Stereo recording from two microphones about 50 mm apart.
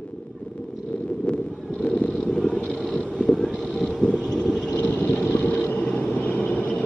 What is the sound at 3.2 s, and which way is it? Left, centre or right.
Vehicle, centre.